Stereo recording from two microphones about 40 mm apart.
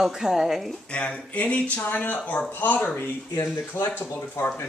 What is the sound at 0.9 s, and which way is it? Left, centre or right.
Speech, left.